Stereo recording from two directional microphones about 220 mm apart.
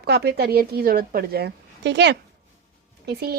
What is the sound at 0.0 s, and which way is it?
Speech, 45° right (ahead or behind).